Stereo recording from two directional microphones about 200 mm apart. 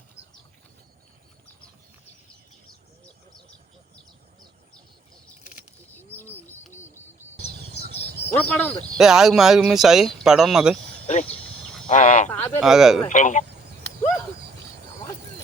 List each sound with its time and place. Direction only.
6.7 s owl: 10° left (ahead or behind)
8.0 s bird: 50° right (ahead or behind)
8.3 s speech: 10° left (ahead or behind)
9.0 s speech: centre (ahead or behind)
11.0 s a sound: 30° left (ahead or behind)
11.4 s livestock: 5° left (ahead or behind)
11.9 s a sound: 40° left (ahead or behind)
12.3 s a sound: 10° left (ahead or behind)
12.6 s speech: centre (ahead or behind)
13.1 s speech: 40° left (ahead or behind)